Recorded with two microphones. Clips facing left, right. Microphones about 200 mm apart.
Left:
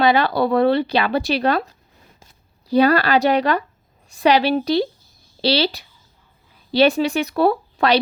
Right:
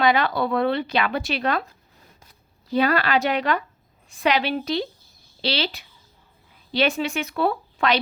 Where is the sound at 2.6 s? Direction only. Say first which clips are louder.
Left 6 dB; 35° left (ahead or behind).